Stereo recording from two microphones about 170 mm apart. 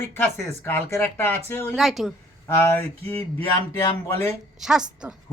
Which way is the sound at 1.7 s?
Centre (ahead or behind).